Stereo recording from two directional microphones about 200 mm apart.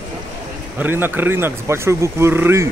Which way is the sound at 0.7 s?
10° right (ahead or behind).